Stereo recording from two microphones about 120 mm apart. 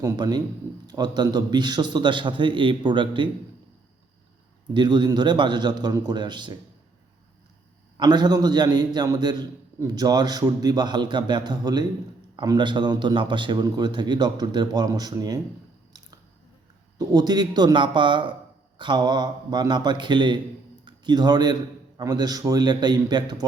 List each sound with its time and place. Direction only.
0.0 s a man's voice: 35° right (ahead or behind)
4.7 s a man's voice: 40° right (ahead or behind)
7.9 s a man's voice: 35° right (ahead or behind)
17.1 s a man's voice: 35° right (ahead or behind)